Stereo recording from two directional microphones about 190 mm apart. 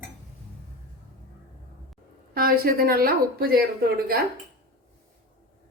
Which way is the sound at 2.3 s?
50° right (ahead or behind).